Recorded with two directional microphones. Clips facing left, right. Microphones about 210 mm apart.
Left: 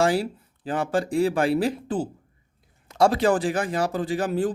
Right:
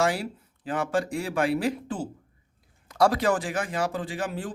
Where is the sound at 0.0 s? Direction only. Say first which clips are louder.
Left 4 dB; 30° left (ahead or behind).